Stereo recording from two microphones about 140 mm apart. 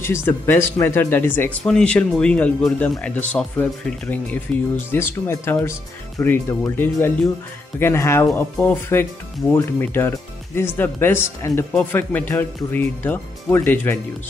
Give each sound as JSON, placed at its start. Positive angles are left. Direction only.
{"t": 0.0, "sound": "speech", "side_deg": 15}